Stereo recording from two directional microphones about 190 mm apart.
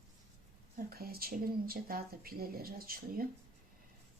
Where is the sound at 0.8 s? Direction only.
50° right (ahead or behind).